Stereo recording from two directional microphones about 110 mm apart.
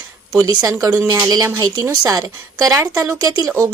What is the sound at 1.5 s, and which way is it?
Speech, 35° right (ahead or behind).